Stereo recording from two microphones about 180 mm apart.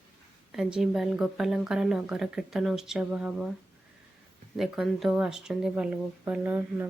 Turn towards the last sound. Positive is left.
turn(degrees=-10)  # may be behind; listen again after turning